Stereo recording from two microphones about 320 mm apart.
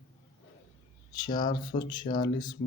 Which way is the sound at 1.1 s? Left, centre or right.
Centre.